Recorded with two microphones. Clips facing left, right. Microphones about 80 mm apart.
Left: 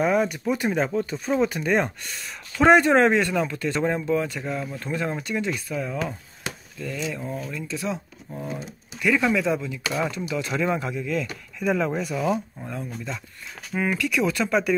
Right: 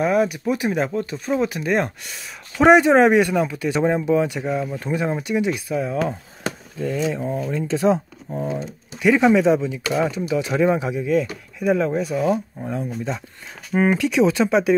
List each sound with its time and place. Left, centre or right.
0.0 s speech: centre
6.0 s chop: right
7.5 s speech: right
9.0 s speech: right
9.9 s speech: centre
12.5 s speech: centre
13.7 s speech: right